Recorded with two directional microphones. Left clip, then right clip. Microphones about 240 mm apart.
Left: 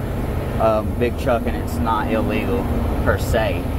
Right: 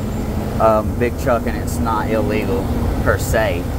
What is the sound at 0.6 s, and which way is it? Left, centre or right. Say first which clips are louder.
Speech: right 4 dB; centre.